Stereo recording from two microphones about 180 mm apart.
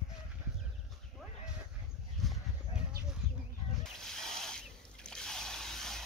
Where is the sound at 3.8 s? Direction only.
5° left (ahead or behind).